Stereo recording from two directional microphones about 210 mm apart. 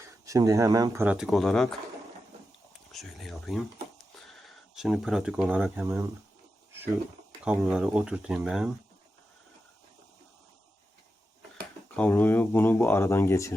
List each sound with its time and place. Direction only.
0.3 s speech: 15° right (ahead or behind)
1.0 s speech: 5° right (ahead or behind)
2.9 s speech: centre (ahead or behind)
7.4 s speech: 5° right (ahead or behind)
11.9 s speech: 5° left (ahead or behind)